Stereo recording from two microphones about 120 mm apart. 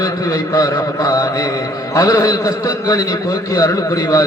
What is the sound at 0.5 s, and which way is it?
A man's voice, 30° left (ahead or behind).